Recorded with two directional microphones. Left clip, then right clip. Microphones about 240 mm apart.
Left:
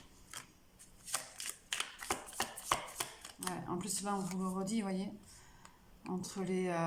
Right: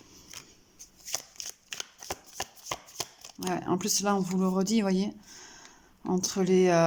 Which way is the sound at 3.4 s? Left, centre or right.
Right.